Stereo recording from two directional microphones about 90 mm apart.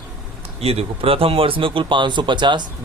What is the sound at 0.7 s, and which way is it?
A man's voice, 90° right.